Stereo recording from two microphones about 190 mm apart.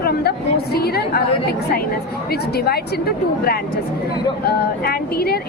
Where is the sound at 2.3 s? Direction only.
55° left (ahead or behind).